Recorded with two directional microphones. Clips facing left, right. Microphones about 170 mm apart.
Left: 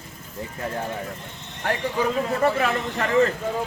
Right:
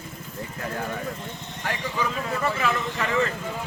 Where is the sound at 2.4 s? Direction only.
50° left (ahead or behind).